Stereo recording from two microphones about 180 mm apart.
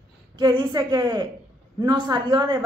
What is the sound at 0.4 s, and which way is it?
Speech, 25° right (ahead or behind).